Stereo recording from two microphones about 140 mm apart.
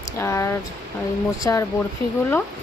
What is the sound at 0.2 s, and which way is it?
Speech, 20° left (ahead or behind).